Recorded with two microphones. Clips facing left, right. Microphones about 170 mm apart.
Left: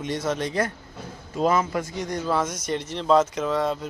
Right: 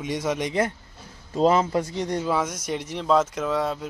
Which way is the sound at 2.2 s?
10° right (ahead or behind).